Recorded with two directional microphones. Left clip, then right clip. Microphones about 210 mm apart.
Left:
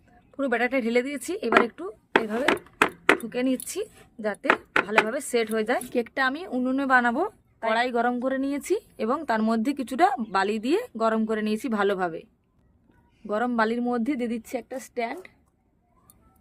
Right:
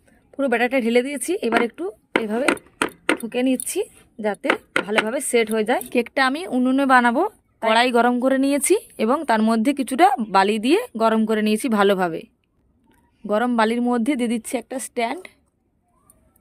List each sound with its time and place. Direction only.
0.3 s speech: 30° right (ahead or behind)